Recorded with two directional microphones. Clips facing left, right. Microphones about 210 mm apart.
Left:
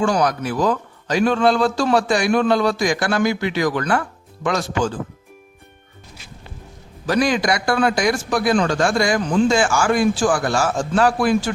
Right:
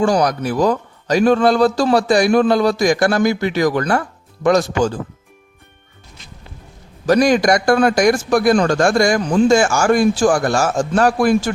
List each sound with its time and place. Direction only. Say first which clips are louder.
0.0 s a man's voice: right 3 dB; 35° right (ahead or behind)
7.1 s a man's voice: right 5 dB; 45° right (ahead or behind)